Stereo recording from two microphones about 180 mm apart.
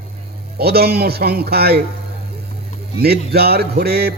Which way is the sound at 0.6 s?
60° right (ahead or behind).